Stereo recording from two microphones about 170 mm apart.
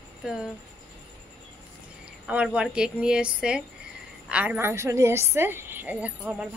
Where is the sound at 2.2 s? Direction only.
5° right (ahead or behind).